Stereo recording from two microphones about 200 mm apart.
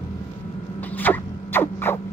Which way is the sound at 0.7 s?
10° left (ahead or behind).